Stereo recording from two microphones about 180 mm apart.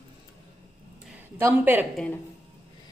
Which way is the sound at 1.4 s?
10° right (ahead or behind).